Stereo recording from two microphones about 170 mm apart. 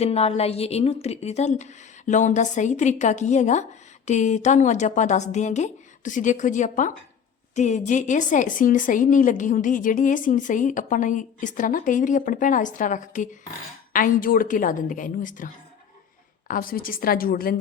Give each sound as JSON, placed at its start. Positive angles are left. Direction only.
{"t": 0.0, "sound": "a woman's voice", "side_deg": 40}